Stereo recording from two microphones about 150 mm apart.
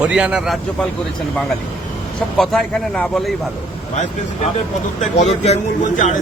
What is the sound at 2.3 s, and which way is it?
Speech, 5° left (ahead or behind).